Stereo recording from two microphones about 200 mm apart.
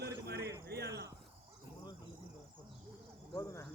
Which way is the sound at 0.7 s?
55° right (ahead or behind).